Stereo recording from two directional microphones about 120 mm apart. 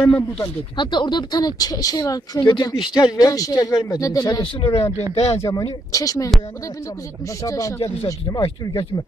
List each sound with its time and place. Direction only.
0.0 s speech: 10° left (ahead or behind)
0.7 s speech: 40° left (ahead or behind)
5.1 s speech: 60° left (ahead or behind)
5.4 s speech: 30° left (ahead or behind)
7.4 s speech: 25° left (ahead or behind)